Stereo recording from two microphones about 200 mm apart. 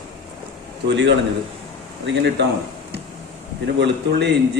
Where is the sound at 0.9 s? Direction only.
65° right (ahead or behind).